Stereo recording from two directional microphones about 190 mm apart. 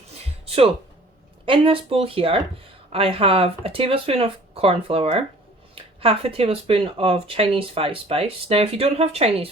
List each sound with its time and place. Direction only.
0.4 s music: 30° right (ahead or behind)
1.5 s speech: 30° right (ahead or behind)